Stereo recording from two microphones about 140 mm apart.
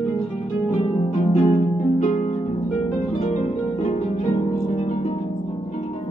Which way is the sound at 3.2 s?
60° left (ahead or behind).